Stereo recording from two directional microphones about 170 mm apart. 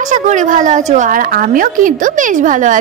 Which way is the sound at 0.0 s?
45° right (ahead or behind).